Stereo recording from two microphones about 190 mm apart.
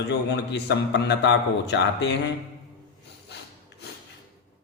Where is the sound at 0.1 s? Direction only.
65° left (ahead or behind).